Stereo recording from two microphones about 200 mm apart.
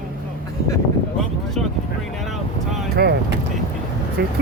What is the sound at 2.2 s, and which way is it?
Speech, centre (ahead or behind).